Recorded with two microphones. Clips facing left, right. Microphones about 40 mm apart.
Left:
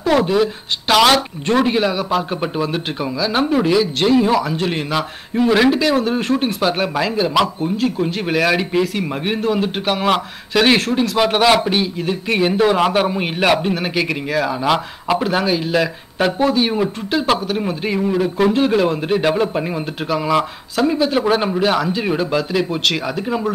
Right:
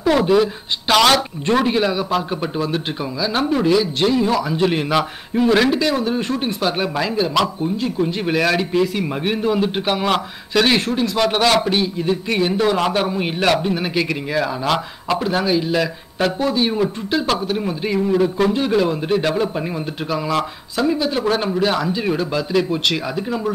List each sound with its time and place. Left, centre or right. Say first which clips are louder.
0.1 s speech: even; centre
4.5 s speech: right 2 dB; centre